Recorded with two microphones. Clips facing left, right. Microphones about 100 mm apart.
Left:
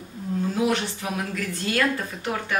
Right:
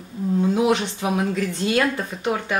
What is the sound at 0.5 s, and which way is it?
A woman's voice, 20° right (ahead or behind).